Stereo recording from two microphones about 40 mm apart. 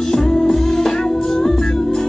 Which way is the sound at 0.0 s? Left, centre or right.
Centre.